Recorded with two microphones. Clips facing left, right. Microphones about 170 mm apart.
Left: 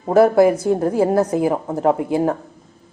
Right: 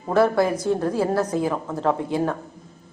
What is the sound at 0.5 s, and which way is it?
Speech, 10° left (ahead or behind).